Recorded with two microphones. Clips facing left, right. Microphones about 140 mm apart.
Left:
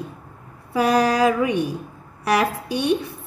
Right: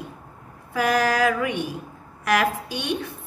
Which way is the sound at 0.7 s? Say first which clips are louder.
Left 3 dB; 30° left (ahead or behind).